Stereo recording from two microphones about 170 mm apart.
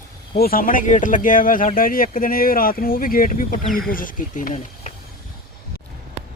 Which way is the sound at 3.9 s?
55° left (ahead or behind).